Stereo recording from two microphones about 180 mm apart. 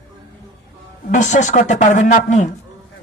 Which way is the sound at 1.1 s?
45° left (ahead or behind).